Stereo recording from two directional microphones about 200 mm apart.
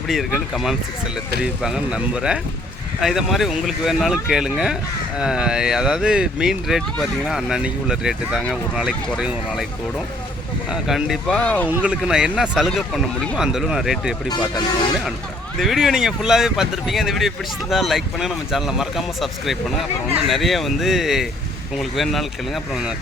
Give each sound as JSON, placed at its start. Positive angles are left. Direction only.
{"t": 0.1, "sound": "speech", "side_deg": 0}
{"t": 10.7, "sound": "speech", "side_deg": 0}
{"t": 11.7, "sound": "speech", "side_deg": -5}
{"t": 14.3, "sound": "speech", "side_deg": 20}
{"t": 15.5, "sound": "speech", "side_deg": 0}